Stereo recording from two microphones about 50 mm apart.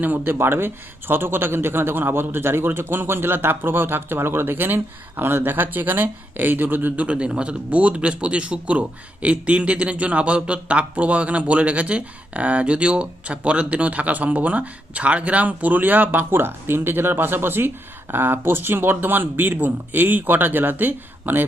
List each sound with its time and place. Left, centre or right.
0.0 s speech: right
0.3 s speech: right